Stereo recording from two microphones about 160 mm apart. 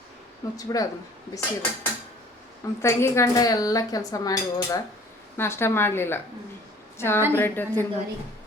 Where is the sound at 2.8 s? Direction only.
15° left (ahead or behind).